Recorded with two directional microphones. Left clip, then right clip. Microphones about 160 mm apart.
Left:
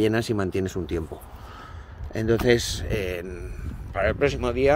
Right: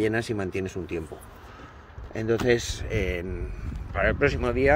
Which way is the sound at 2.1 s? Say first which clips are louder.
Left 2 dB; 50° left (ahead or behind).